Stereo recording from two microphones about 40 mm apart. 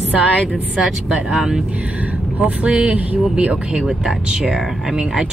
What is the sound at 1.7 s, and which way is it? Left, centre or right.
Speech, right.